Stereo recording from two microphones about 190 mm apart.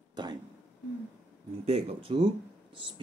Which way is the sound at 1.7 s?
30° right (ahead or behind).